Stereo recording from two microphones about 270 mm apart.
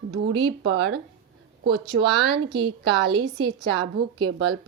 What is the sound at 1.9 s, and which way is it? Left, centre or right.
A woman's voice, centre.